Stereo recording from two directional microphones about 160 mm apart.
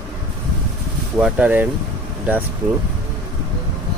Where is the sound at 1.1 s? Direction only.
5° right (ahead or behind).